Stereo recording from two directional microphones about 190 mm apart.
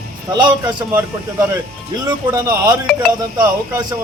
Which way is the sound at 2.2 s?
20° right (ahead or behind).